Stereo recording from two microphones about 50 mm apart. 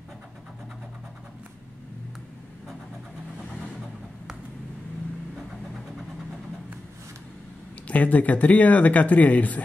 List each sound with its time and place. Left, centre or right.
7.9 s speech: left